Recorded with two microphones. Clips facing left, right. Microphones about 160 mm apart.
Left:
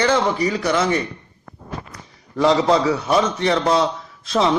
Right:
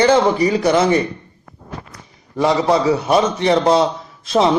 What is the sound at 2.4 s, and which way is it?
Speech, 10° right (ahead or behind).